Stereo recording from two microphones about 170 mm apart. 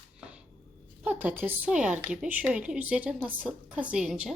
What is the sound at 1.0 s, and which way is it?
Speech, 10° right (ahead or behind).